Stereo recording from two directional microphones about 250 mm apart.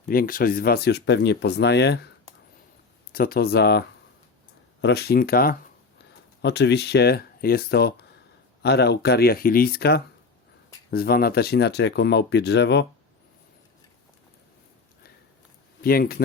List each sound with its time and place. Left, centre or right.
0.0 s speech: left
3.1 s speech: left
15.8 s speech: left